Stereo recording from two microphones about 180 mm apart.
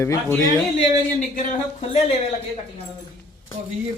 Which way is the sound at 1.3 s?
40° left (ahead or behind).